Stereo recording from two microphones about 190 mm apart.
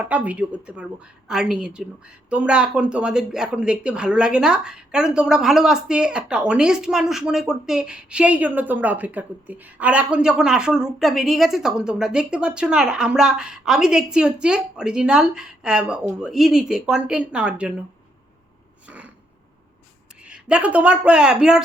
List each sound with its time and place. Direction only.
0.0 s a woman's voice: 5° right (ahead or behind)
18.9 s a sound: 5° right (ahead or behind)
20.2 s a woman's voice: 5° right (ahead or behind)